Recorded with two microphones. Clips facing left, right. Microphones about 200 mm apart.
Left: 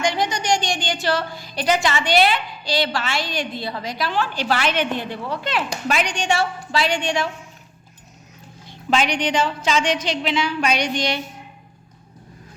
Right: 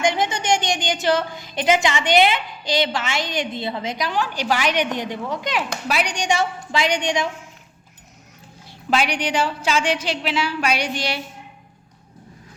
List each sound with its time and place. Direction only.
0.0 s a woman's voice: 20° right (ahead or behind)
8.6 s a woman's voice: 10° right (ahead or behind)